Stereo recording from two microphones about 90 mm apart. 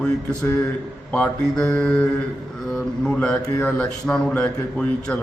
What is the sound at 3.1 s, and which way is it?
Speech, 15° left (ahead or behind).